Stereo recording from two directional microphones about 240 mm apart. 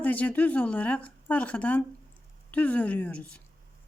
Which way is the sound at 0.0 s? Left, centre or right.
Centre.